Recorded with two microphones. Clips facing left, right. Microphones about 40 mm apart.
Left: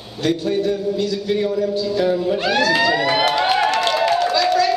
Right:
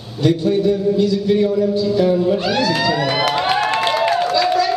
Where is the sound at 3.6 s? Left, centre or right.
Right.